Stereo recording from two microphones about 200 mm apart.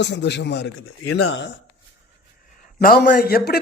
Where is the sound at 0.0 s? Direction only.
60° left (ahead or behind).